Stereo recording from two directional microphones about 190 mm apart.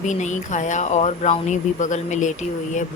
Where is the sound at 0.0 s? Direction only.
40° left (ahead or behind).